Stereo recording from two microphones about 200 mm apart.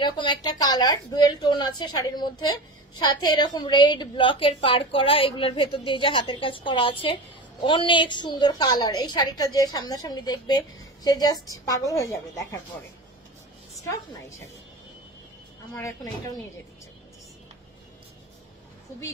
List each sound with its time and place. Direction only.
0.0 s a woman's voice: 20° left (ahead or behind)
15.7 s a woman's voice: 15° left (ahead or behind)